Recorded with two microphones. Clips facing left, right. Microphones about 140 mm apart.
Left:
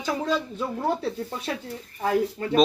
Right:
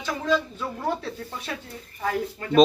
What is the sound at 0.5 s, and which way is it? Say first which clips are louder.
Speech: left 2 dB; 25° left (ahead or behind).